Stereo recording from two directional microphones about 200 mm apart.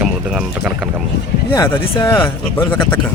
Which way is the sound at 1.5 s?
15° left (ahead or behind).